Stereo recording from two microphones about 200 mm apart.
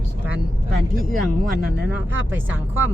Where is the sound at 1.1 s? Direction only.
50° right (ahead or behind).